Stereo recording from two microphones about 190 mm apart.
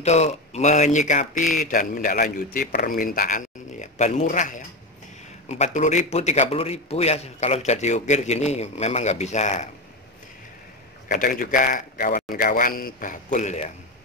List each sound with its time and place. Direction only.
0.0 s speech: 35° left (ahead or behind)
11.1 s a man's voice: 45° left (ahead or behind)